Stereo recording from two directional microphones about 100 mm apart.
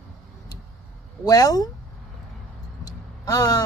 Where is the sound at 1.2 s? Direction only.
40° left (ahead or behind).